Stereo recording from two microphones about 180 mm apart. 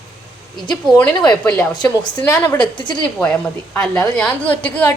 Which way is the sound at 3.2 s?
5° left (ahead or behind).